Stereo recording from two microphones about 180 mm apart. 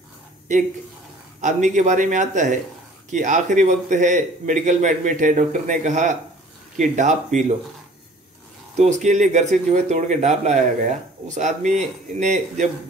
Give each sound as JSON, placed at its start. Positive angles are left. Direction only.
{"t": 1.4, "sound": "a man's voice", "side_deg": -40}
{"t": 8.7, "sound": "speech", "side_deg": -40}